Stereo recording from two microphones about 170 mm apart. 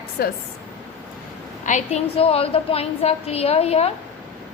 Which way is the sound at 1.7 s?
40° left (ahead or behind).